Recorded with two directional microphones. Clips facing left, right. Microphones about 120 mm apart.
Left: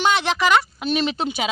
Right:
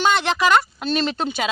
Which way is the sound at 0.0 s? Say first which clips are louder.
Right 1 dB; 5° left (ahead or behind).